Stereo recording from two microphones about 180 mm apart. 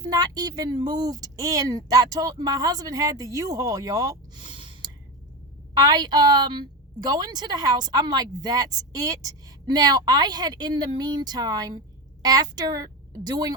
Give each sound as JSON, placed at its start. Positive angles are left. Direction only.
{"t": 0.0, "sound": "a woman's voice", "side_deg": -20}